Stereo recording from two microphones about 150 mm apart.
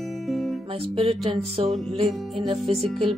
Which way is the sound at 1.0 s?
35° right (ahead or behind).